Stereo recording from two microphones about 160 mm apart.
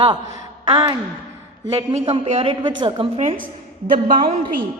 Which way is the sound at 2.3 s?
35° right (ahead or behind).